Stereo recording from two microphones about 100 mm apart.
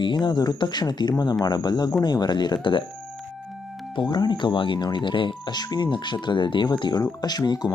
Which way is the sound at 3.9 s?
45° left (ahead or behind).